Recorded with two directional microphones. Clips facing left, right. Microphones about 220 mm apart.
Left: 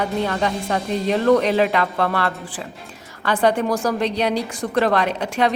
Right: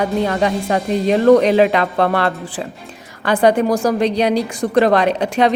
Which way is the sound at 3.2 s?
15° right (ahead or behind).